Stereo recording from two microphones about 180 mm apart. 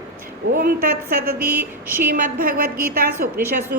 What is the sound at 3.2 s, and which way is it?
Speech, 50° right (ahead or behind).